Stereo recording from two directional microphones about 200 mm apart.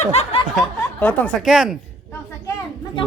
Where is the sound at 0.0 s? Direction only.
30° left (ahead or behind).